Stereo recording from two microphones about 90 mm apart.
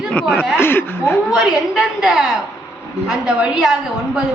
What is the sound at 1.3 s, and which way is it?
Speech, 5° right (ahead or behind).